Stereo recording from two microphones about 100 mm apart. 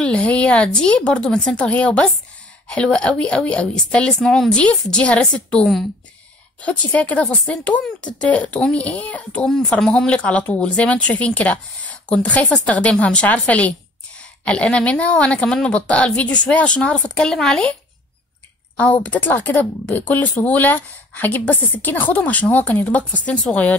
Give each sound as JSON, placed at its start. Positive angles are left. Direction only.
{"t": 0.0, "sound": "a woman's voice", "side_deg": 10}
{"t": 18.8, "sound": "a woman's voice", "side_deg": 15}